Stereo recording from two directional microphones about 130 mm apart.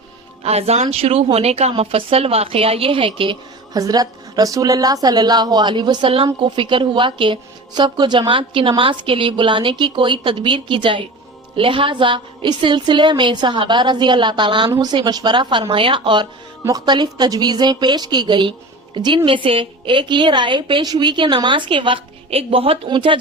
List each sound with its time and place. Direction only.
0.4 s a woman's voice: 55° right (ahead or behind)
3.7 s a woman's voice: 30° right (ahead or behind)